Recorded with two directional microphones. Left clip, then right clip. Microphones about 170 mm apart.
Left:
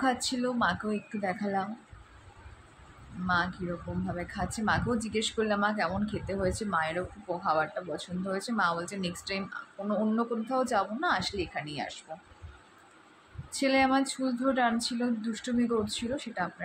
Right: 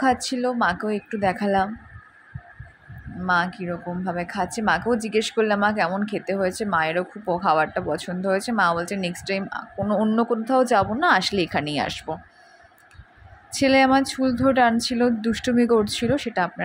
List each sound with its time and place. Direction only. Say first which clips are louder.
0.0 s speech: right 8 dB; 35° right (ahead or behind)
4.0 s speech: right 11 dB; 35° right (ahead or behind)
13.5 s speech: right 8 dB; 40° right (ahead or behind)